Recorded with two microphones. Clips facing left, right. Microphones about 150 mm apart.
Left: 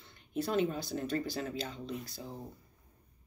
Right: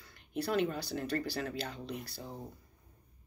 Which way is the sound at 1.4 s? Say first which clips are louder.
Even; 60° right (ahead or behind).